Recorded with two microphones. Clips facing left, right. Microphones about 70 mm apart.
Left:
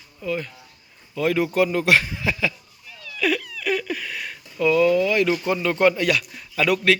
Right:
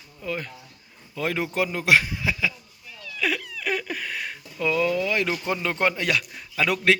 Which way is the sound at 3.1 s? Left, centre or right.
Centre.